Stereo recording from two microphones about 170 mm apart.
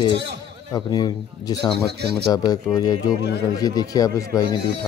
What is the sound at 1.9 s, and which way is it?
Speech, 75° right (ahead or behind).